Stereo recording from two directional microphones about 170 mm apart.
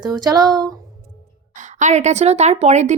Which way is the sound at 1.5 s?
45° right (ahead or behind).